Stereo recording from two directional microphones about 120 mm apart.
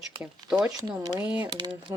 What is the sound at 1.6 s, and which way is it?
Speech, 45° right (ahead or behind).